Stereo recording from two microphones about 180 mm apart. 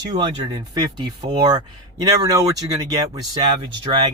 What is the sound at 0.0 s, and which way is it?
Speech, 25° right (ahead or behind).